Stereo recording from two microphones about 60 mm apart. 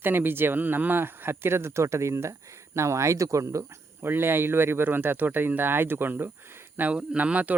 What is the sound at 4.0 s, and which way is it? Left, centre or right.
Speech, right.